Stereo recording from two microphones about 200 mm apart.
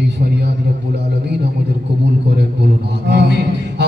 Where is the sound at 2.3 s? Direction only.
55° right (ahead or behind).